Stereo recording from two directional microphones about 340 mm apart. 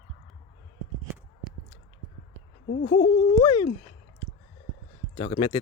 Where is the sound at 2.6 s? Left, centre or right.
Left.